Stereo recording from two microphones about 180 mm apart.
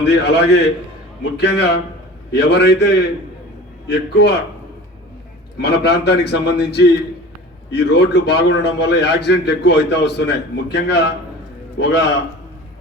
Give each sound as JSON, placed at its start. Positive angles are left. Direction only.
{"t": 0.1, "sound": "a man's voice", "side_deg": 70}
{"t": 5.5, "sound": "a man's voice", "side_deg": 65}